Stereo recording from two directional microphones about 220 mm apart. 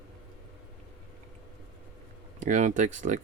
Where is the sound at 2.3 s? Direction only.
35° right (ahead or behind).